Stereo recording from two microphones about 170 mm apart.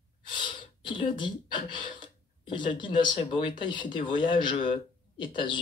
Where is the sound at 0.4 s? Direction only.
30° left (ahead or behind).